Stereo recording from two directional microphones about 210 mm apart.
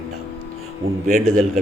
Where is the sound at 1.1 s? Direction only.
40° right (ahead or behind).